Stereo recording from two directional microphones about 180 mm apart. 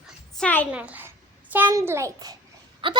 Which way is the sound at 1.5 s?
15° right (ahead or behind).